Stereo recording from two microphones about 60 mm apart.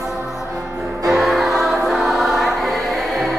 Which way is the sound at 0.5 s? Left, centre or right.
Right.